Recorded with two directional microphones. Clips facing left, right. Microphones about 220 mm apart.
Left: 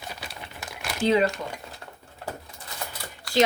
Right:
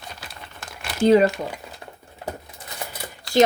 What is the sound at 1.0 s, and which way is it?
Speech, 45° right (ahead or behind).